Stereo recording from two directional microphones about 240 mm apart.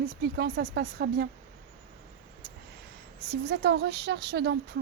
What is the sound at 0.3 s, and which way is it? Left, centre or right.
Speech, right.